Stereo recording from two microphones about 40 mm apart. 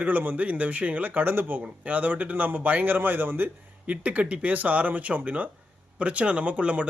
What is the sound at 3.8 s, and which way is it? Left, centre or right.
Speech, right.